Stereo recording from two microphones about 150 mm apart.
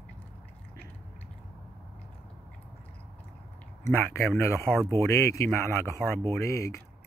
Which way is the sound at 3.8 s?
20° left (ahead or behind).